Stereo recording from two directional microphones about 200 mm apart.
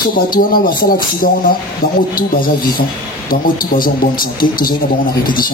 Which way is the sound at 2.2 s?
45° left (ahead or behind).